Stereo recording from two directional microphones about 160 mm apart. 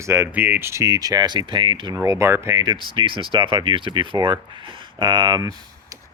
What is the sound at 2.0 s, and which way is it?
Speech, 15° right (ahead or behind).